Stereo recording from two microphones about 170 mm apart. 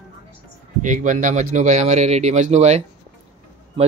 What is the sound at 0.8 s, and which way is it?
A man's voice, 50° right (ahead or behind).